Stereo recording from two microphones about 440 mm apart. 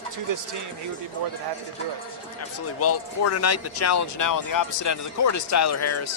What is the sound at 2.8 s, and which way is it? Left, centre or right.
Speech, left.